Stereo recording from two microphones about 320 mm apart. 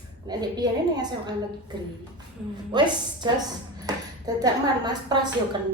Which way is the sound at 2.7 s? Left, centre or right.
Centre.